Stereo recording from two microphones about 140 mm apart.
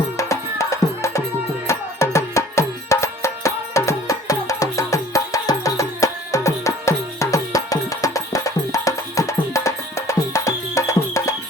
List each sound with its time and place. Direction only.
0.2 s music: 20° left (ahead or behind)